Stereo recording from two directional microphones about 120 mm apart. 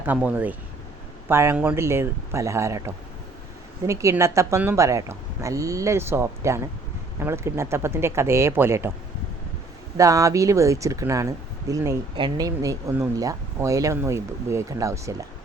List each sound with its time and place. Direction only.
0.0 s speech: 15° right (ahead or behind)
10.0 s speech: 30° right (ahead or behind)
12.1 s speech: 35° right (ahead or behind)